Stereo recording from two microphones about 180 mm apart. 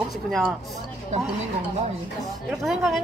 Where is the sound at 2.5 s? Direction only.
Centre (ahead or behind).